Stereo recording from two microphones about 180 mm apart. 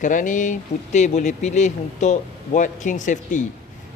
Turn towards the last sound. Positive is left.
turn(degrees=45)  # may be behind; listen again after turning